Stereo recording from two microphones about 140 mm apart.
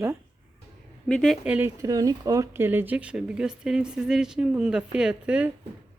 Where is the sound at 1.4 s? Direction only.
10° right (ahead or behind).